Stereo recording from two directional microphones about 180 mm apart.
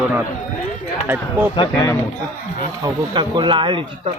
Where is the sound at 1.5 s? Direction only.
25° left (ahead or behind).